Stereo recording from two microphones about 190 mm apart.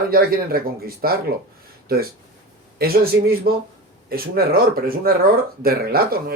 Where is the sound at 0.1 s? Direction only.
50° right (ahead or behind).